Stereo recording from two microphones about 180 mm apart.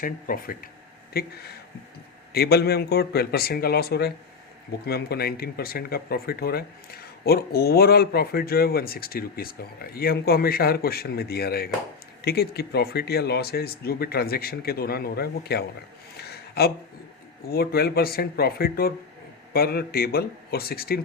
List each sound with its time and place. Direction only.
0.0 s speech: 50° left (ahead or behind)
16.1 s a sound: 65° left (ahead or behind)
17.4 s speech: 55° left (ahead or behind)